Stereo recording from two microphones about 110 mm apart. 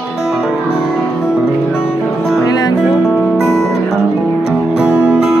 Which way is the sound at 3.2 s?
5° right (ahead or behind).